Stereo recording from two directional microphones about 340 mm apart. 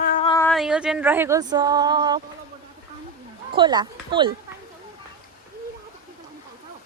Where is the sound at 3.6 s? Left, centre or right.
Centre.